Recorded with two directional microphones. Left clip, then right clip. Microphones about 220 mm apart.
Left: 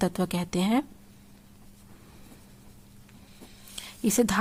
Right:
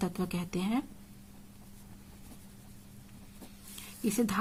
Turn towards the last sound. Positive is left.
turn(degrees=40)  # may be behind; listen again after turning